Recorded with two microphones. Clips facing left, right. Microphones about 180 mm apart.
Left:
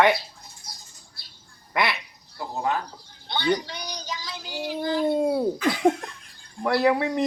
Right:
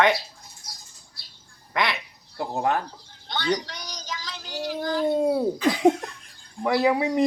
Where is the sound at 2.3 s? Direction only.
55° right (ahead or behind).